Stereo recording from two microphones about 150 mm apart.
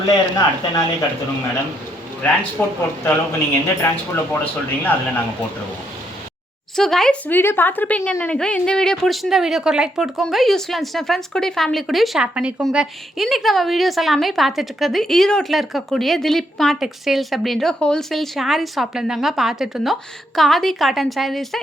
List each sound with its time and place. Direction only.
0.0 s speech: 25° left (ahead or behind)
2.2 s speech: 15° left (ahead or behind)
6.7 s a woman's voice: 5° left (ahead or behind)